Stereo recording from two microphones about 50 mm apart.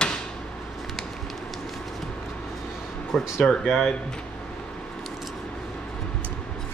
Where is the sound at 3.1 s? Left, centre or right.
Centre.